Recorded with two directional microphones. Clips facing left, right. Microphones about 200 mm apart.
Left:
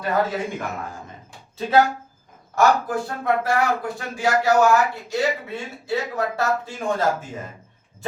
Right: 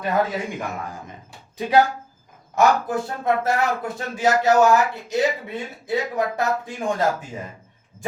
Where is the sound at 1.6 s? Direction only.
15° right (ahead or behind).